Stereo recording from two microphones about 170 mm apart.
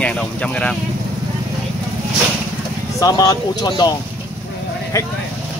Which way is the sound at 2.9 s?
20° left (ahead or behind).